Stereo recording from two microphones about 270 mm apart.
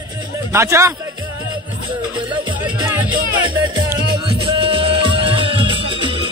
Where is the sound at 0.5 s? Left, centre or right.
Centre.